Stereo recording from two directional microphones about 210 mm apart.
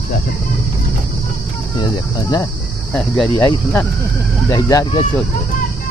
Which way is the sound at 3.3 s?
15° left (ahead or behind).